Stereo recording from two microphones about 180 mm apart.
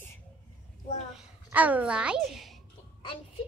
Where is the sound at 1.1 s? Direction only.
10° right (ahead or behind).